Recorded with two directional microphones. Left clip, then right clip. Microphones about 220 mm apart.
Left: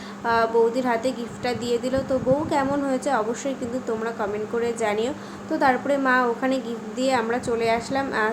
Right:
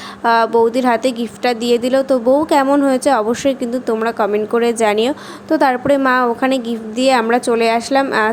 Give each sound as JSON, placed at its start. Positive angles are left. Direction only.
{"t": 0.3, "sound": "a woman's voice", "side_deg": -40}